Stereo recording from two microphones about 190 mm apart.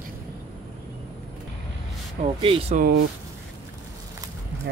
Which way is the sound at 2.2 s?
30° right (ahead or behind).